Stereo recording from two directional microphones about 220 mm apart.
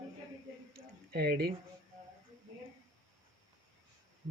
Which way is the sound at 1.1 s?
45° right (ahead or behind).